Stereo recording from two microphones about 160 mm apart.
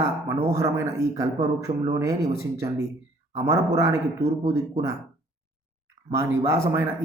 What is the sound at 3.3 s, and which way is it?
A man's voice, 20° right (ahead or behind).